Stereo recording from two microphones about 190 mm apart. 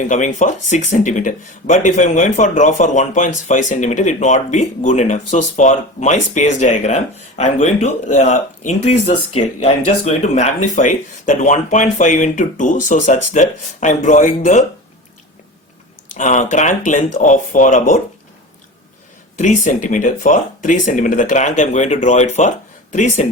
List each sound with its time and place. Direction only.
0.1 s speech: 40° left (ahead or behind)
16.1 s speech: 40° left (ahead or behind)
19.4 s speech: 40° left (ahead or behind)